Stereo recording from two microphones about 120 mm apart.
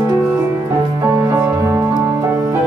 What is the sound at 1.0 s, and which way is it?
Music, 25° right (ahead or behind).